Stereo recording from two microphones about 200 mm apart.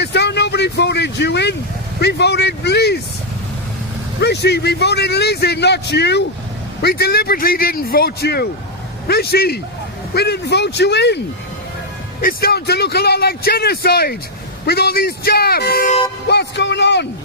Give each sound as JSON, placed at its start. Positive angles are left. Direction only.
{"t": 0.0, "sound": "vehicle", "side_deg": 60}
{"t": 2.0, "sound": "a man's voice", "side_deg": 55}
{"t": 4.2, "sound": "a man's voice", "side_deg": 55}
{"t": 12.2, "sound": "speech", "side_deg": 50}